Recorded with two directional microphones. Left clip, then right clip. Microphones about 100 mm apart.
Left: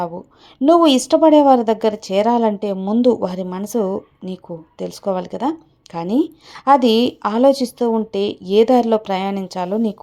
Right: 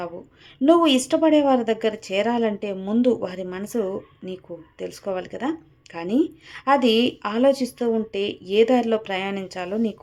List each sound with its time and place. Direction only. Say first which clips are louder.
0.6 s speech: left 5 dB; 45° left (ahead or behind)